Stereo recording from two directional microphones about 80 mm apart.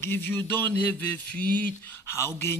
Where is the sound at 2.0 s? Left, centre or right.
Left.